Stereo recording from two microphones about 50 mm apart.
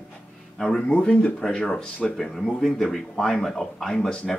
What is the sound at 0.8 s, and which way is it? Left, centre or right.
Speech, left.